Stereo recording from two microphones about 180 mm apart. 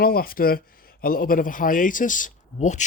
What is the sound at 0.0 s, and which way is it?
Speech, 55° left (ahead or behind).